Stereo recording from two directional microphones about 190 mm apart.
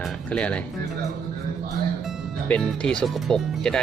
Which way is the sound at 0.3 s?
5° left (ahead or behind).